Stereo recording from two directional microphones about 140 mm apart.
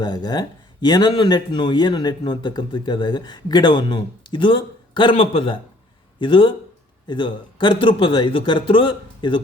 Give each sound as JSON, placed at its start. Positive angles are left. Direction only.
{"t": 0.0, "sound": "speech", "side_deg": 30}